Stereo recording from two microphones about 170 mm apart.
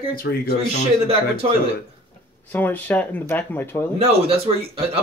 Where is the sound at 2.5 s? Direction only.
10° left (ahead or behind).